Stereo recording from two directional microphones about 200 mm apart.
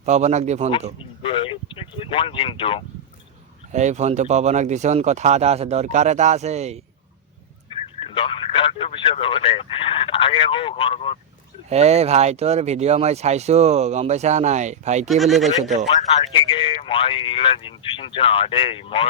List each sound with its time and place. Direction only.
0.0 s speech: 35° right (ahead or behind)
1.2 s speech: 25° left (ahead or behind)
3.7 s speech: 35° right (ahead or behind)
7.9 s speech: 25° left (ahead or behind)
11.7 s speech: 30° right (ahead or behind)
15.0 s speech: centre (ahead or behind)
16.3 s speech: 25° left (ahead or behind)